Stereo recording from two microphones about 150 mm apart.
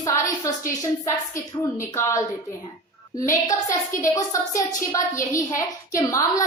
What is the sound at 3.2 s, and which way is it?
A woman's voice, 20° left (ahead or behind).